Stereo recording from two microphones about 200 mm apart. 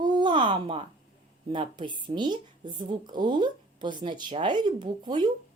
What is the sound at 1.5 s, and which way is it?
A woman's voice, 25° right (ahead or behind).